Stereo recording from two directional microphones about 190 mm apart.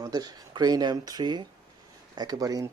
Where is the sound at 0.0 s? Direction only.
20° right (ahead or behind).